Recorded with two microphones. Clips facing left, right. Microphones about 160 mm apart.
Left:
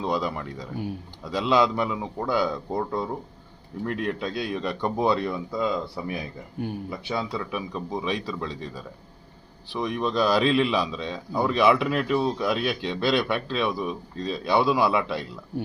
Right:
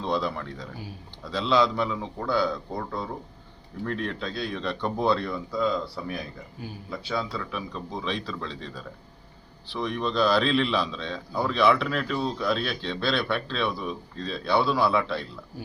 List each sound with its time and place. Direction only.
0.0 s a man's voice: 10° left (ahead or behind)
6.6 s speech: 60° left (ahead or behind)
6.9 s a man's voice: 15° left (ahead or behind)